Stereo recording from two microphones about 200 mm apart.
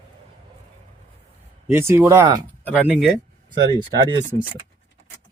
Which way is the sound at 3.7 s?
20° right (ahead or behind).